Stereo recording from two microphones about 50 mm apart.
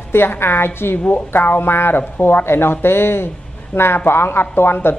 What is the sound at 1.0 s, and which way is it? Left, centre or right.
Speech, left.